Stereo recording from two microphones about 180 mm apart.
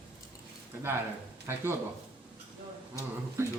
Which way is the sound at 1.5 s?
15° right (ahead or behind).